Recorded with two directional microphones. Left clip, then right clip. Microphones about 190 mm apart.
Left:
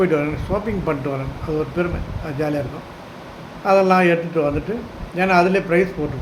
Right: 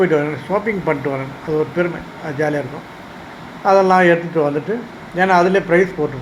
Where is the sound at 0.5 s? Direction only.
15° left (ahead or behind).